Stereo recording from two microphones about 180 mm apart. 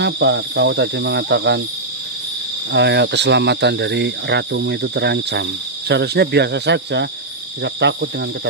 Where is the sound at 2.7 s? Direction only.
80° right.